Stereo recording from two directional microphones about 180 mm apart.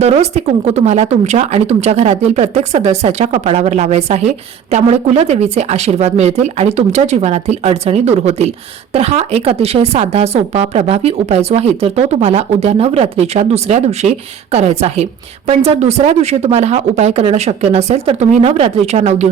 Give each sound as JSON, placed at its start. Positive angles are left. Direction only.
{"t": 0.0, "sound": "speech", "side_deg": -35}